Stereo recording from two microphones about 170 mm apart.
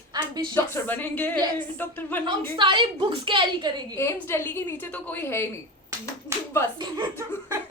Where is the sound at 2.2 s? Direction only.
30° right (ahead or behind).